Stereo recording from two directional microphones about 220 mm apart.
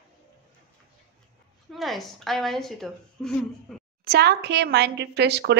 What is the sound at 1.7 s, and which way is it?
A woman's voice, centre (ahead or behind).